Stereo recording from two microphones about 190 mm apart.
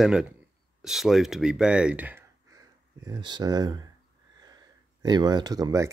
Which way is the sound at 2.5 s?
20° right (ahead or behind).